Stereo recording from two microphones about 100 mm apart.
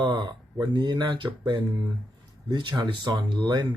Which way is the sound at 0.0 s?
50° right (ahead or behind).